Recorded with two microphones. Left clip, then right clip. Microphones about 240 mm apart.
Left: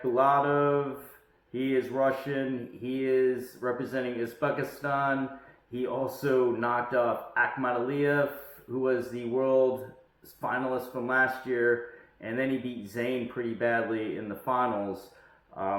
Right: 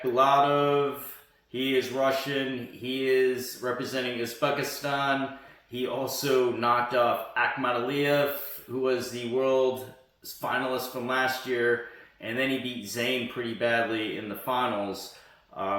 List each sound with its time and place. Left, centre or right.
0.1 s speech: right